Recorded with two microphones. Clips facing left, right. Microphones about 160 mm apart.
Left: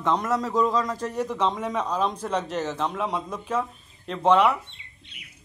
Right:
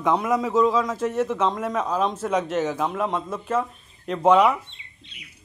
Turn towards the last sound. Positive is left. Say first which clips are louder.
# right 2 dB
turn(degrees=55)  # may be behind; listen again after turning